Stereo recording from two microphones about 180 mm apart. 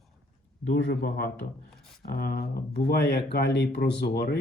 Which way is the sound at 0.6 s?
75° left (ahead or behind).